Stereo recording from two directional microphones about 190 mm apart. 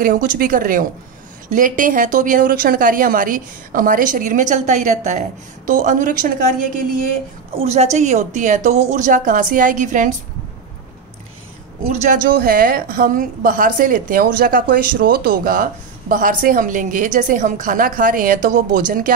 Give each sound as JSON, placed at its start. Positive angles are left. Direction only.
{"t": 0.0, "sound": "a woman's voice", "side_deg": -50}
{"t": 11.8, "sound": "a woman's voice", "side_deg": -50}